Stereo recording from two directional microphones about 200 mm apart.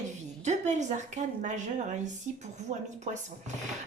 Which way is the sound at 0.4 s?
35° right (ahead or behind).